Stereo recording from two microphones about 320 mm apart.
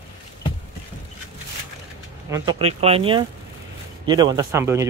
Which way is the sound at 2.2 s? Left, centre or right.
Centre.